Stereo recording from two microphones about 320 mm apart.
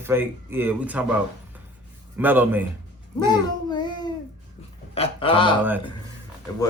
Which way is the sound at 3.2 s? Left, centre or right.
Centre.